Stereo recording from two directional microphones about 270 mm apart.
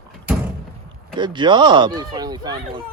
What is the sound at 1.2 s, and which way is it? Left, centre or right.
Speech, centre.